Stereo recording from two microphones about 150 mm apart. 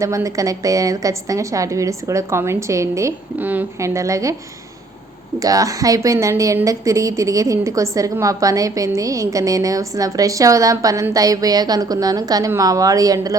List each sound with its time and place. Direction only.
0.0 s a woman's voice: 20° right (ahead or behind)
5.4 s a woman's voice: 25° right (ahead or behind)